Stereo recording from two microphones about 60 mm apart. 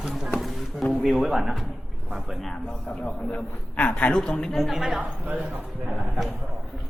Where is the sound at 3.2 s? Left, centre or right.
Left.